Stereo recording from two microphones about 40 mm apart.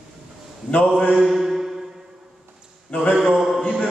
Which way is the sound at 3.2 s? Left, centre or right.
Centre.